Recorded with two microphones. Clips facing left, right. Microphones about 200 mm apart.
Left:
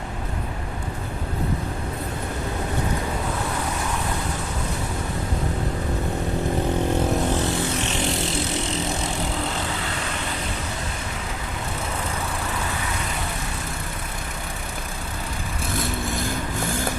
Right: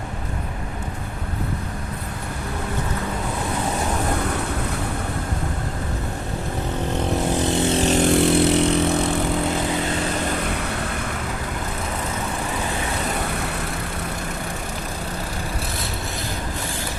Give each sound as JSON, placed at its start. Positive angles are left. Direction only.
{"t": 7.4, "sound": "vehicle", "side_deg": -25}
{"t": 7.8, "sound": "vehicle", "side_deg": -40}